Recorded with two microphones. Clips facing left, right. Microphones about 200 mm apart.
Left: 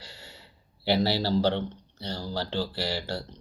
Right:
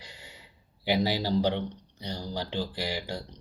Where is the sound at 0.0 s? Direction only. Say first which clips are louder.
Left 2 dB; 15° right (ahead or behind).